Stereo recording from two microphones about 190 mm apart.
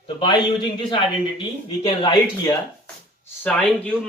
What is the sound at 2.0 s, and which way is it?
Speech, 25° left (ahead or behind).